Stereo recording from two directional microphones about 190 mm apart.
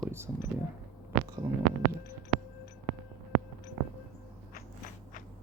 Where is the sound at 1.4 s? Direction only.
20° right (ahead or behind).